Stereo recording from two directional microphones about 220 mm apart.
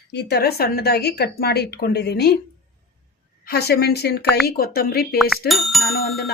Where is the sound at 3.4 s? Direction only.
45° left (ahead or behind).